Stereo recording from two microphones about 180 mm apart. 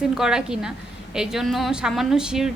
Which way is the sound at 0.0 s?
5° right (ahead or behind).